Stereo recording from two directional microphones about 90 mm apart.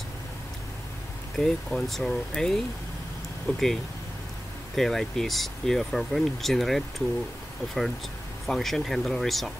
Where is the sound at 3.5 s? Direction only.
20° left (ahead or behind).